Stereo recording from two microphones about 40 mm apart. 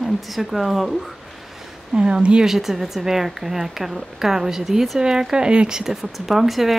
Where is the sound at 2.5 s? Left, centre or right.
Centre.